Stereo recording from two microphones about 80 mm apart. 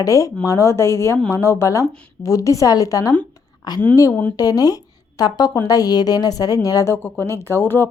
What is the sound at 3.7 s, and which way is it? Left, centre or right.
A woman's voice, left.